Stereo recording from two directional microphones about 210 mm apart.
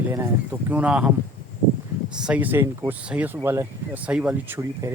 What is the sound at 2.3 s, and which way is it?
Speech, 10° right (ahead or behind).